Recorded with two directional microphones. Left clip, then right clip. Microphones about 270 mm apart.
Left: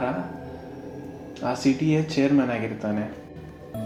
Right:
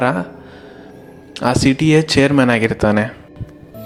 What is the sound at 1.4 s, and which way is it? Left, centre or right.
Speech, right.